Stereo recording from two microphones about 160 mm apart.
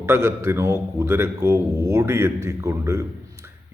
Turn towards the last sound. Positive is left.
turn(degrees=-20)  # may be behind; listen again after turning